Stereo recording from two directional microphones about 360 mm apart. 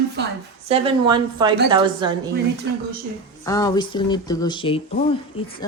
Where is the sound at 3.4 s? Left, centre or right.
Centre.